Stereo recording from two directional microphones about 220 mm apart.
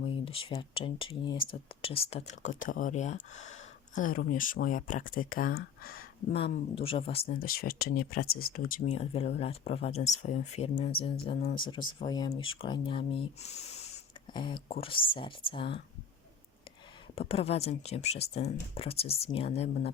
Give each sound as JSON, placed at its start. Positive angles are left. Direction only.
{"t": 0.0, "sound": "speech", "side_deg": 25}
{"t": 6.3, "sound": "speech", "side_deg": 25}
{"t": 7.3, "sound": "speech", "side_deg": 40}
{"t": 8.9, "sound": "speech", "side_deg": 30}
{"t": 17.2, "sound": "speech", "side_deg": 25}